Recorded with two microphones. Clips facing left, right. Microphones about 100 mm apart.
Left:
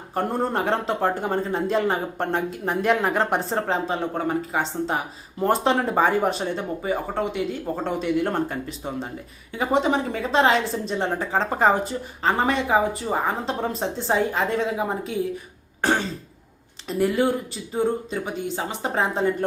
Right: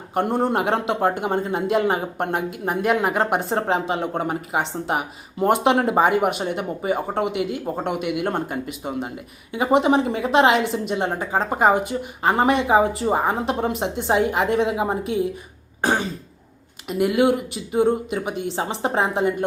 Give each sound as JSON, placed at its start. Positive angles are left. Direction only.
{"t": 0.1, "sound": "a woman's voice", "side_deg": -20}
{"t": 4.0, "sound": "a woman's voice", "side_deg": -25}
{"t": 15.8, "sound": "throat clearing", "side_deg": -15}
{"t": 16.9, "sound": "a woman's voice", "side_deg": -10}